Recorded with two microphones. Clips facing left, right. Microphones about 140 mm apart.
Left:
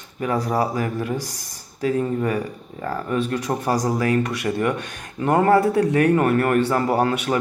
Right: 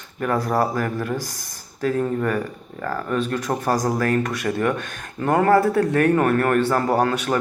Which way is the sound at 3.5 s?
15° right (ahead or behind).